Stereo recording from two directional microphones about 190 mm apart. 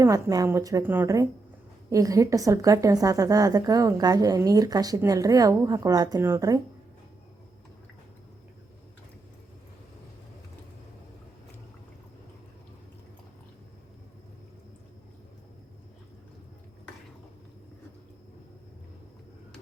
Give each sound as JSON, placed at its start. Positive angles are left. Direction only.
{"t": 0.0, "sound": "a woman's voice", "side_deg": -20}